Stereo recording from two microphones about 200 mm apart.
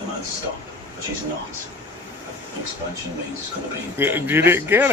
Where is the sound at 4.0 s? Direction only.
10° right (ahead or behind).